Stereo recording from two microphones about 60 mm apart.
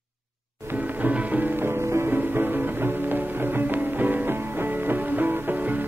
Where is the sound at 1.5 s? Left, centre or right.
Right.